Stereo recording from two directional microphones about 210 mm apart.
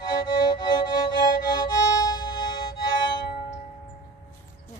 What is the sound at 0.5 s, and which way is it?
Music, 20° left (ahead or behind).